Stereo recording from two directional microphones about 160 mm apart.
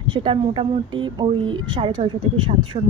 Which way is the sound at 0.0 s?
30° right (ahead or behind).